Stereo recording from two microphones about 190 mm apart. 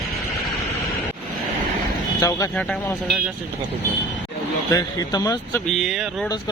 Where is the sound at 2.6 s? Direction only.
5° left (ahead or behind).